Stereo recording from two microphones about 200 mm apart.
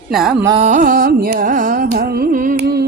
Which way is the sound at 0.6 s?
35° right (ahead or behind).